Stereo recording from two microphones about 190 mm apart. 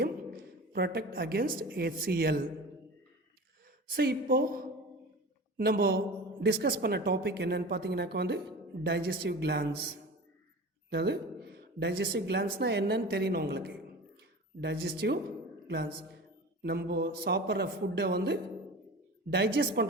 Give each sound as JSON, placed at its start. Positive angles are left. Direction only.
{"t": 0.0, "sound": "a woman's voice", "side_deg": -55}
{"t": 3.8, "sound": "a woman's voice", "side_deg": -55}
{"t": 19.5, "sound": "a woman's voice", "side_deg": -60}